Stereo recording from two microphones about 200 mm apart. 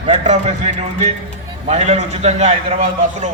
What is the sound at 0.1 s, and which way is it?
Speech, 35° right (ahead or behind).